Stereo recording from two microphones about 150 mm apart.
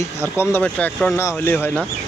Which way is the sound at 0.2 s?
15° left (ahead or behind).